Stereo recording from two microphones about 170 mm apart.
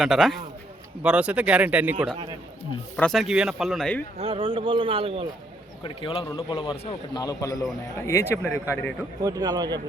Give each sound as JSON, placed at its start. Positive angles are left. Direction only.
{"t": 0.0, "sound": "speech", "side_deg": 0}
{"t": 2.9, "sound": "speech", "side_deg": 5}
{"t": 4.2, "sound": "a man's voice", "side_deg": -30}
{"t": 5.8, "sound": "a man's voice", "side_deg": 35}
{"t": 9.2, "sound": "speech", "side_deg": -20}